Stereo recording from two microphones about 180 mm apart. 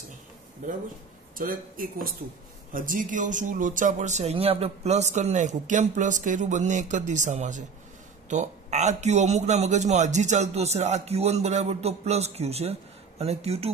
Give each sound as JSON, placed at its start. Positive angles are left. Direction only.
{"t": 1.3, "sound": "a man's voice", "side_deg": -50}